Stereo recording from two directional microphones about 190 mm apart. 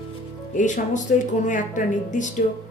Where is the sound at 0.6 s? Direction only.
40° left (ahead or behind).